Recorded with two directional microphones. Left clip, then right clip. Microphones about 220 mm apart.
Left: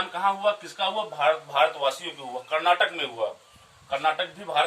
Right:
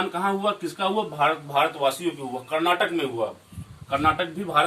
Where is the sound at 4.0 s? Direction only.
5° left (ahead or behind).